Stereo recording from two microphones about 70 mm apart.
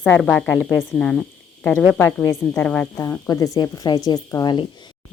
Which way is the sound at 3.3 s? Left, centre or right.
Left.